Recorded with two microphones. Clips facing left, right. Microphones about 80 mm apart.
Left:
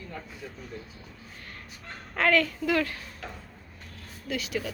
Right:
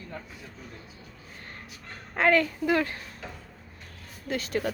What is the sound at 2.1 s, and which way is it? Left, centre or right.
Speech, right.